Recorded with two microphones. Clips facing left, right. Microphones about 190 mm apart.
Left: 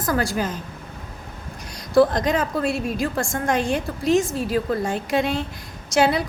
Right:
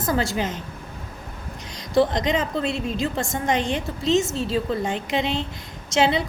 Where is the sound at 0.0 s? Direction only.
25° right (ahead or behind).